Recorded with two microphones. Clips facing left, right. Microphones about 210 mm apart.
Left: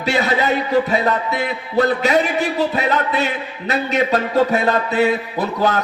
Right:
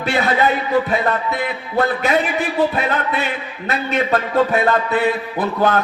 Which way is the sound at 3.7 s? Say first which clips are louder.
Left 1 dB; 55° right (ahead or behind).